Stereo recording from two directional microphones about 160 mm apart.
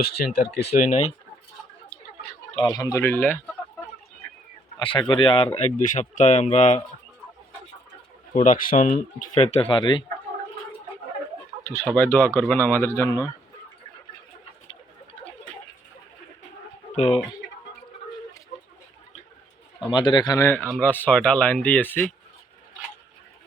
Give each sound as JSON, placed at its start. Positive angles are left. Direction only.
{"t": 0.0, "sound": "speech", "side_deg": 80}
{"t": 0.8, "sound": "speech", "side_deg": 50}
{"t": 2.6, "sound": "speech", "side_deg": 25}
{"t": 4.8, "sound": "speech", "side_deg": 30}
{"t": 5.5, "sound": "speech", "side_deg": 55}
{"t": 8.4, "sound": "speech", "side_deg": 55}
{"t": 11.6, "sound": "speech", "side_deg": 15}
{"t": 16.9, "sound": "speech", "side_deg": 45}
{"t": 19.9, "sound": "speech", "side_deg": 30}